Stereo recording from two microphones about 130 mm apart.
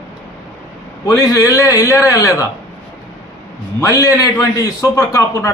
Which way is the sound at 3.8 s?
25° left (ahead or behind).